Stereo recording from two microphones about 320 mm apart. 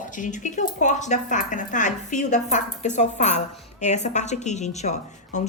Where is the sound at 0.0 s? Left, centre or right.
Left.